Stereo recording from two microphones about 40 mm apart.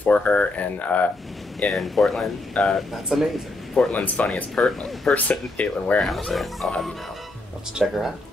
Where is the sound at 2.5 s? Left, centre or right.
Left.